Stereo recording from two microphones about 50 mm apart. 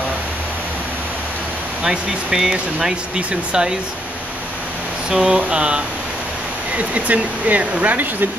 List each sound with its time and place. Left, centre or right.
1.8 s speech: centre
5.1 s a sound: centre
6.8 s speech: right